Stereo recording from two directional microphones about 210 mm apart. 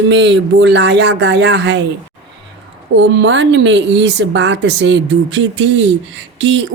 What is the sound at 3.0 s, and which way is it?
A woman's voice, 60° right (ahead or behind).